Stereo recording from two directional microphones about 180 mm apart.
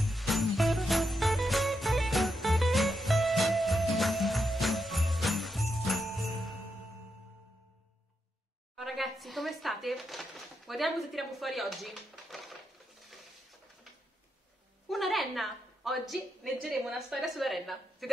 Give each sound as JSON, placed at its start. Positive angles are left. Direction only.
{"t": 0.0, "sound": "jingle bell", "side_deg": 0}
{"t": 8.7, "sound": "speech", "side_deg": 0}
{"t": 13.0, "sound": "a sound", "side_deg": 0}
{"t": 14.9, "sound": "a woman's voice", "side_deg": 0}